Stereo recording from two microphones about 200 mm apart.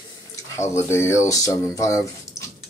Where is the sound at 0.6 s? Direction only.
15° left (ahead or behind).